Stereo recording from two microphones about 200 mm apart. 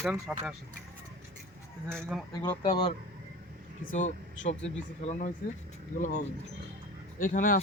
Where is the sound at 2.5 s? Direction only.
20° left (ahead or behind).